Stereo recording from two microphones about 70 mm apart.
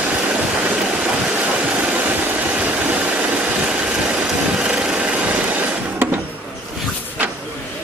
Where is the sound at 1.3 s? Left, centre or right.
Right.